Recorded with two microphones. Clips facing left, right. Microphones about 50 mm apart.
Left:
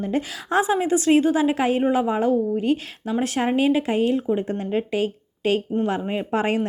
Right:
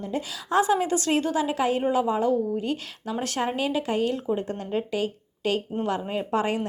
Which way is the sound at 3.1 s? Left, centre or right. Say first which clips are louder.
Left 5 dB; left.